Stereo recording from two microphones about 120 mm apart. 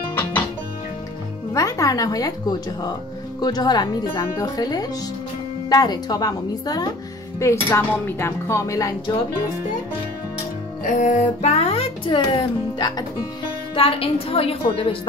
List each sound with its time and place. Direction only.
0.1 s music: 15° left (ahead or behind)
1.5 s speech: 25° left (ahead or behind)
3.3 s speech: 35° left (ahead or behind)
4.1 s speech: 20° left (ahead or behind)
4.5 s speech: 35° left (ahead or behind)
10.8 s speech: 90° left; by 13.3 s 35° left (ahead or behind)
13.7 s speech: 50° left (ahead or behind)